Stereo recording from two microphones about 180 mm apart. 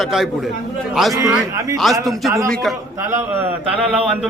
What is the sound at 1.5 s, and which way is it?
Speech, 20° right (ahead or behind).